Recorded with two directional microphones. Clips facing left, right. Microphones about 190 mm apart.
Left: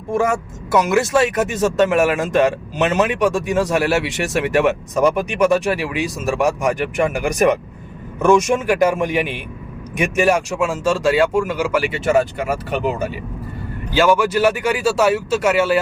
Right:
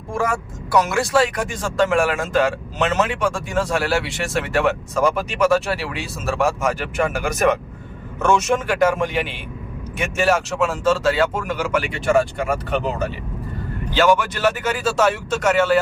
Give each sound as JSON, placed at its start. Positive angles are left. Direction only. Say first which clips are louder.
{"t": 0.1, "sound": "speech", "louder": "left 4 dB", "side_deg": 25}